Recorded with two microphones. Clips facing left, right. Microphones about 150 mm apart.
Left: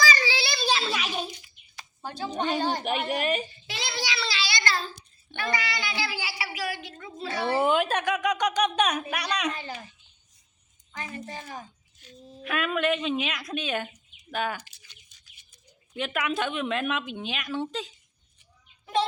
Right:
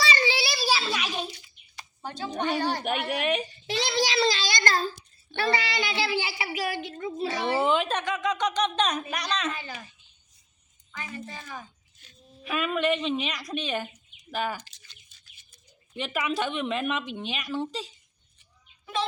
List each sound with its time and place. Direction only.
0.0 s a sound: 25° right (ahead or behind)
0.3 s a sound: 10° right (ahead or behind); by 2.5 s 10° left (ahead or behind)
2.6 s speech: 15° left (ahead or behind)
2.8 s a woman's voice: centre (ahead or behind)
3.8 s child singing: 40° right (ahead or behind)
5.4 s a child's voice: 30° right (ahead or behind)
7.6 s speech: 5° left (ahead or behind)
10.9 s a woman's voice: 40° left (ahead or behind)
12.5 s a woman's voice: centre (ahead or behind)
14.6 s bird: 10° left (ahead or behind)
16.0 s a woman's voice: centre (ahead or behind)